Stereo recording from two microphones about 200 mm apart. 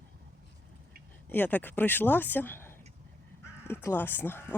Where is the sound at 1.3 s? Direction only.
10° left (ahead or behind).